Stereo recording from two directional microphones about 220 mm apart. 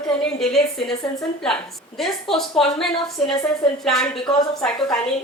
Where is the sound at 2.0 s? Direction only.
Centre (ahead or behind).